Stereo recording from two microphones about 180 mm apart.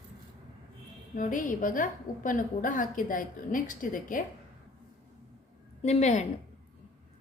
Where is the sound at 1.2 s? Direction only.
45° left (ahead or behind).